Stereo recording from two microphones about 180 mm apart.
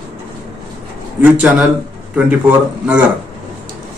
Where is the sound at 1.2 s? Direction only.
10° right (ahead or behind).